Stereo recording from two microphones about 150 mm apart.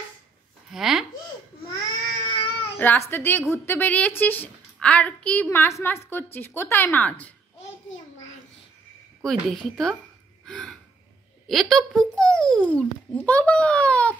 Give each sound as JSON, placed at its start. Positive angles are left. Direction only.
{"t": 0.7, "sound": "speech", "side_deg": -5}
{"t": 1.7, "sound": "baby cry", "side_deg": 25}
{"t": 2.8, "sound": "speech", "side_deg": 15}
{"t": 9.2, "sound": "a woman's voice", "side_deg": 0}
{"t": 10.4, "sound": "gasp", "side_deg": 5}
{"t": 11.4, "sound": "a child's voice", "side_deg": 0}